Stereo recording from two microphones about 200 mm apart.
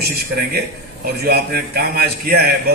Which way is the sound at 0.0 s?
55° right (ahead or behind).